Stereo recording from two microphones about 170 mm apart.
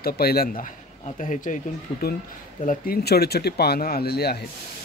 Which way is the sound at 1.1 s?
50° left (ahead or behind).